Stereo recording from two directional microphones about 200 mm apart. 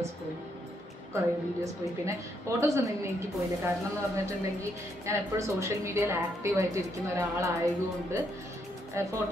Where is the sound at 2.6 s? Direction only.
15° right (ahead or behind).